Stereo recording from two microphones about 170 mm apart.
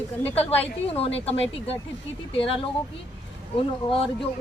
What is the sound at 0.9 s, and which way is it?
Speech, 35° left (ahead or behind).